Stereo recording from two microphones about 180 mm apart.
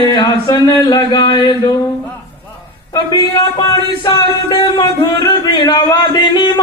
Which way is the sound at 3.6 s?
25° left (ahead or behind).